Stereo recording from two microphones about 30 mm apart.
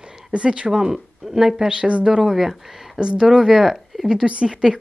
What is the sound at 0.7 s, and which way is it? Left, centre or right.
Speech, centre.